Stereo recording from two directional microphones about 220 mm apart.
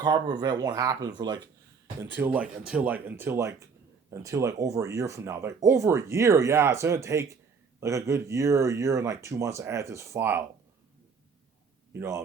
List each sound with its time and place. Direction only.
0.0 s speech: 20° right (ahead or behind)
11.9 s speech: 15° right (ahead or behind)